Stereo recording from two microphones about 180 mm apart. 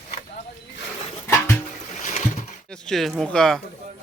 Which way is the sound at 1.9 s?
45° left (ahead or behind).